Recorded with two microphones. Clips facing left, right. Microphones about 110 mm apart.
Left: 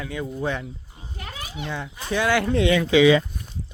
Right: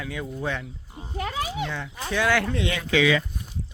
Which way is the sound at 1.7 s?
10° left (ahead or behind).